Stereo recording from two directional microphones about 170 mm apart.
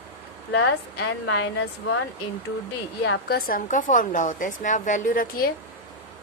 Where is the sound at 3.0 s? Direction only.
65° left (ahead or behind).